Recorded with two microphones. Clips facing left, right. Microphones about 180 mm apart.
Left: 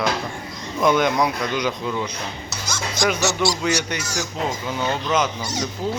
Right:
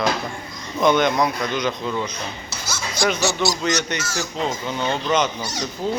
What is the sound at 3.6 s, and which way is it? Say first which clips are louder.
A man's voice: even; 10° left (ahead or behind).